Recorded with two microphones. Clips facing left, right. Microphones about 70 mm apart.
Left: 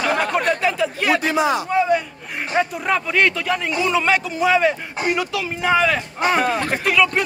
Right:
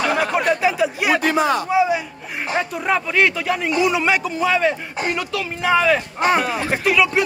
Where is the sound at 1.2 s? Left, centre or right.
Right.